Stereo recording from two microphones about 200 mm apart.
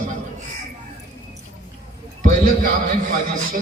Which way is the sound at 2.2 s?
40° right (ahead or behind).